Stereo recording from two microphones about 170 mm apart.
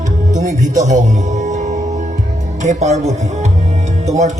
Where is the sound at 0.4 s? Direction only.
45° right (ahead or behind).